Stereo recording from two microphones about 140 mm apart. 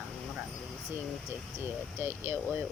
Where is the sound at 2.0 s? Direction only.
15° right (ahead or behind).